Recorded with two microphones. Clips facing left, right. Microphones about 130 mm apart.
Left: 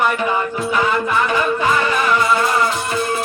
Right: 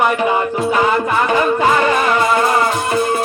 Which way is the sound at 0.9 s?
45° right (ahead or behind).